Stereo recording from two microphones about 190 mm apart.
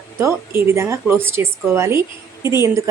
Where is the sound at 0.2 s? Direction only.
15° right (ahead or behind).